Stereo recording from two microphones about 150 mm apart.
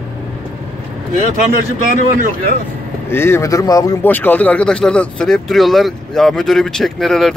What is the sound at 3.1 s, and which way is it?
Speech, 15° left (ahead or behind).